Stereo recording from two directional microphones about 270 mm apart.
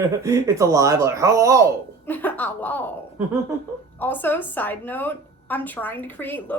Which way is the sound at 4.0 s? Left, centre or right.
Centre.